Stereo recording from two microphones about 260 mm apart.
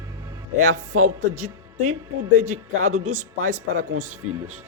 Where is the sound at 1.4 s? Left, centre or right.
Right.